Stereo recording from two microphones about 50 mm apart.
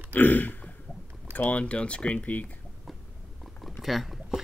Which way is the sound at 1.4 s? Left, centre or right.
Left.